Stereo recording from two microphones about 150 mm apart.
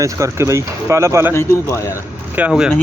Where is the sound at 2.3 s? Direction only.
5° right (ahead or behind).